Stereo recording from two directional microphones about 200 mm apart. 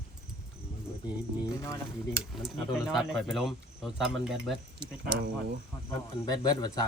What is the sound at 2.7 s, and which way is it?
Speech, centre (ahead or behind).